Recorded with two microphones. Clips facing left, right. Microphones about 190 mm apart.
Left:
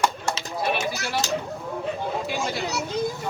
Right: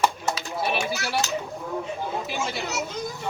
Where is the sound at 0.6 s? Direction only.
Centre (ahead or behind).